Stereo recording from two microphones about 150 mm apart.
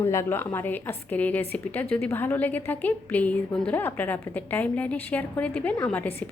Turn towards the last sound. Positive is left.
turn(degrees=15)  # may be behind; listen again after turning